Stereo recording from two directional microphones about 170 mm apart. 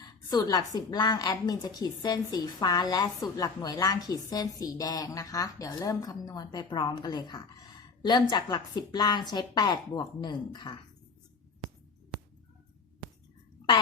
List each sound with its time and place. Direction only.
0.3 s a woman's voice: 25° left (ahead or behind)